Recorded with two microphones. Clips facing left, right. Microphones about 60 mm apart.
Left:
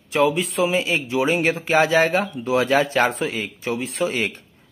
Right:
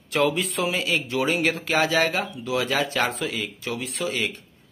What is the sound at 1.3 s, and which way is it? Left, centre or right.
Speech, left.